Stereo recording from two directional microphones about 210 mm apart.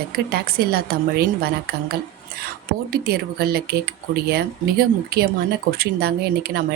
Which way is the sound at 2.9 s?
50° right (ahead or behind).